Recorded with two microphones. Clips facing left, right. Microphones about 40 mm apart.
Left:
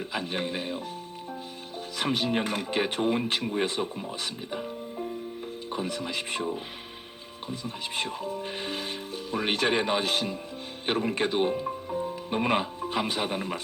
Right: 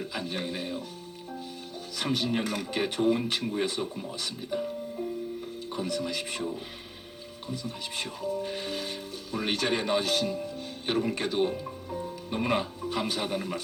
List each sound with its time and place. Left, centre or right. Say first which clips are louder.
0.0 s speech: left 2 dB; left
2.0 s speech: left 2 dB; left; by 5.1 s centre
5.6 s speech: even; left